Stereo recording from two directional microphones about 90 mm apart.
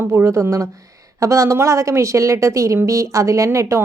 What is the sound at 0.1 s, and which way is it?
A woman's voice, 30° right (ahead or behind).